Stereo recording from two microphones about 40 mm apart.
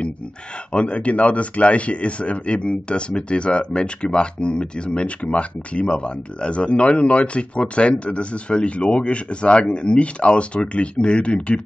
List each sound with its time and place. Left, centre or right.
0.7 s speech: left